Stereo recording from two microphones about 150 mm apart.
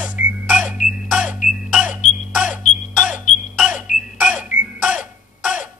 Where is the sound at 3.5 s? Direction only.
5° right (ahead or behind).